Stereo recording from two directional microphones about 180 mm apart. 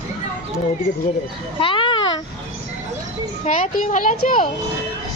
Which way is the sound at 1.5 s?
30° left (ahead or behind).